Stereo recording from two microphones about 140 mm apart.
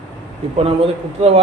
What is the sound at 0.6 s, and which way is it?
Speech, 45° right (ahead or behind).